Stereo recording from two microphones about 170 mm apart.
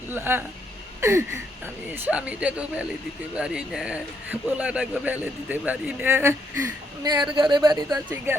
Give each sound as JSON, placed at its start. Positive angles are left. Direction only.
{"t": 0.1, "sound": "speech", "side_deg": -10}
{"t": 7.0, "sound": "speech", "side_deg": -25}